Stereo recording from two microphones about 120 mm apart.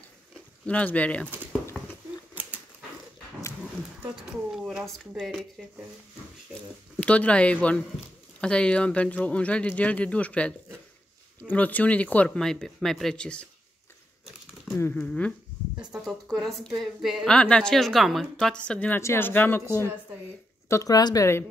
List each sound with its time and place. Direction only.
0.3 s speech: 10° left (ahead or behind)
4.6 s a woman's voice: 5° right (ahead or behind)
7.0 s speech: 10° left (ahead or behind)
14.8 s speech: 15° left (ahead or behind)
15.8 s a woman's voice: 5° right (ahead or behind); by 19.6 s 15° left (ahead or behind)
20.6 s a woman's voice: 25° left (ahead or behind)